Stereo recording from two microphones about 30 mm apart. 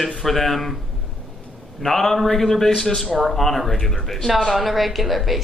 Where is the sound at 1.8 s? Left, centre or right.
Centre.